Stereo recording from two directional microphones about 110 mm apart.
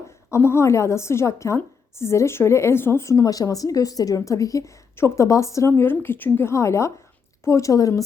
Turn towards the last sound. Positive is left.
turn(degrees=30)  # may be behind; listen again after turning